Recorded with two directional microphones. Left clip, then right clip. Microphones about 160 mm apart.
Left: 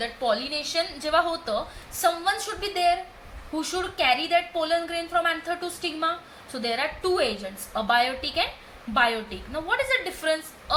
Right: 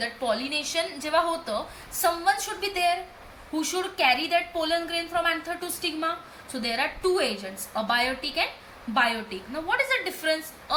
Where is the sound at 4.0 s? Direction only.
50° left (ahead or behind).